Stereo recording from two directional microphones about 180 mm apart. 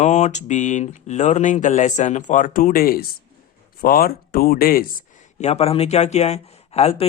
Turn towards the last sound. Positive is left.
turn(degrees=35)  # may be behind; listen again after turning